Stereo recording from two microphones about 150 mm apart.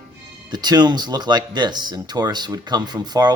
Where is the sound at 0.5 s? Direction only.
30° right (ahead or behind).